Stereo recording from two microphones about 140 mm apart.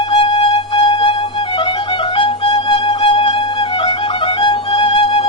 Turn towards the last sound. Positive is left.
turn(degrees=40)  # may be behind; listen again after turning